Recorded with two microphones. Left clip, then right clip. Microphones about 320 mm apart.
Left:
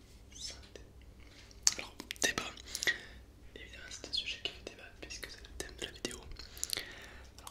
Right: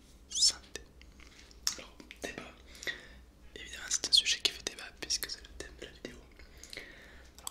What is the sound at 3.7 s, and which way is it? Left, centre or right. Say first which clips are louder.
Whispering: right 12 dB; right.